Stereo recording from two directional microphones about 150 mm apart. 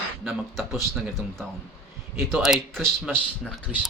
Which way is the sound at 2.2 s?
15° right (ahead or behind).